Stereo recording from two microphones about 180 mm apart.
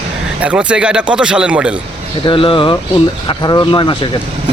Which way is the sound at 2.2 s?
30° left (ahead or behind).